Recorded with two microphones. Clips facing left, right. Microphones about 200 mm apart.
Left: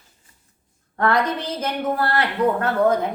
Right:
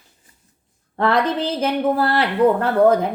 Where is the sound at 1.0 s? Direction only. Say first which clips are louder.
Right 2 dB; 30° right (ahead or behind).